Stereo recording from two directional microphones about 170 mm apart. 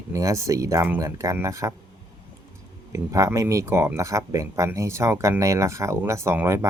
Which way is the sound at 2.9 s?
20° right (ahead or behind).